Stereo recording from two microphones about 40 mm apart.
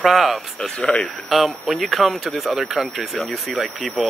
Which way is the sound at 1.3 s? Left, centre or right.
Centre.